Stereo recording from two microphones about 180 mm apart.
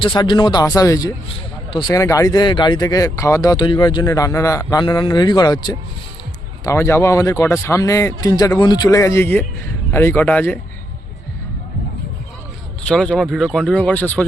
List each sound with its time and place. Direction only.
0.0 s speech: 25° left (ahead or behind); by 10.6 s 10° left (ahead or behind)
12.9 s speech: 5° left (ahead or behind)